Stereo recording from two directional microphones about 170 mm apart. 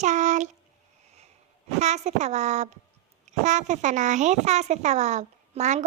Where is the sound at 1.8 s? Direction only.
40° right (ahead or behind).